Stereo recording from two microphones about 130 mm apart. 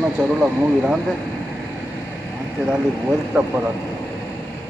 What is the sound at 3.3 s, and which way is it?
Speech, 10° right (ahead or behind).